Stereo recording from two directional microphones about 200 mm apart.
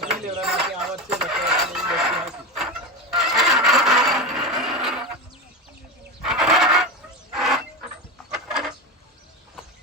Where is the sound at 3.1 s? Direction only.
Centre (ahead or behind).